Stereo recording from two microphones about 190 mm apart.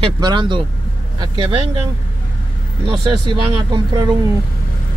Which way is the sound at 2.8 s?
25° right (ahead or behind).